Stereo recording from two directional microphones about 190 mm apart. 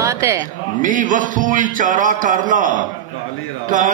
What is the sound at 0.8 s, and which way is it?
Mantra, 45° right (ahead or behind).